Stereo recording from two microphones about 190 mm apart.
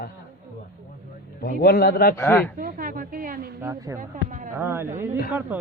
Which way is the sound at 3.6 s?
15° right (ahead or behind).